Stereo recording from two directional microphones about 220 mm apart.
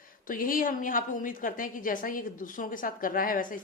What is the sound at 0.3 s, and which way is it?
Speech, 40° left (ahead or behind).